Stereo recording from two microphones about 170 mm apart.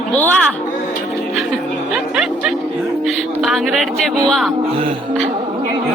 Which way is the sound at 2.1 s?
5° right (ahead or behind).